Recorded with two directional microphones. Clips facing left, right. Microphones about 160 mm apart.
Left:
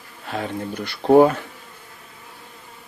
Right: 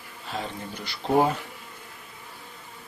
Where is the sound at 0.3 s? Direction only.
55° left (ahead or behind).